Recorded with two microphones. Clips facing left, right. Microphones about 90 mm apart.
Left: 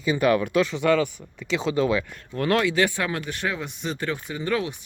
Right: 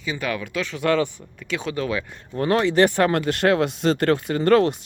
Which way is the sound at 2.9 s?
55° right (ahead or behind).